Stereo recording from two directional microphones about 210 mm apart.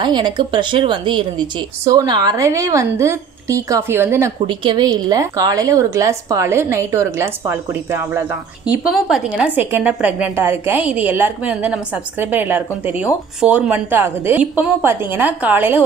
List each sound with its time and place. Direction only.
0.0 s a woman's voice: 20° right (ahead or behind)
4.4 s a woman's voice: 20° right (ahead or behind)